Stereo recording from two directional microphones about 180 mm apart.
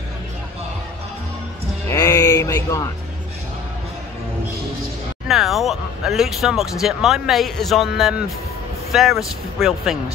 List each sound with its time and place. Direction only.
1.9 s music: 15° left (ahead or behind)
5.3 s speech: centre (ahead or behind)